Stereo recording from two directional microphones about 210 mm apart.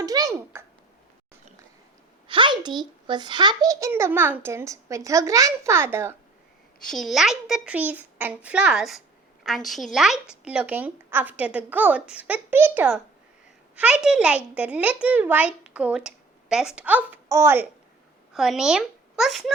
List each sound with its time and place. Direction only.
0.0 s a sound: 15° right (ahead or behind)
2.2 s a child's voice: 25° right (ahead or behind)
6.8 s a child's voice: centre (ahead or behind)
18.3 s speech: centre (ahead or behind)